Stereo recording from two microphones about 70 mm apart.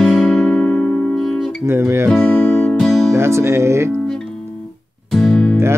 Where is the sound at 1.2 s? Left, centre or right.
Centre.